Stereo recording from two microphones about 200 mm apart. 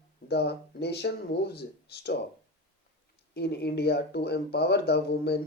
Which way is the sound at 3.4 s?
55° left (ahead or behind).